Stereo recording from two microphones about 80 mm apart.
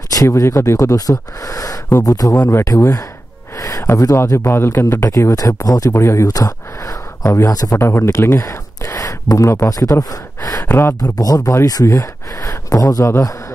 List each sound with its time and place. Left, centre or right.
0.1 s speech: left
4.5 s speech: left
5.3 s speech: left
5.9 s speech: left
6.2 s speech: left
7.8 s speech: left
10.7 s speech: left
11.0 s speech: left